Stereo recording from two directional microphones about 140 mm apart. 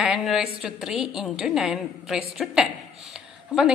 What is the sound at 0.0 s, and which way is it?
A woman's voice, centre (ahead or behind).